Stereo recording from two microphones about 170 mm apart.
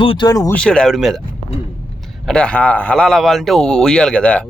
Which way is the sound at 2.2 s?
5° left (ahead or behind).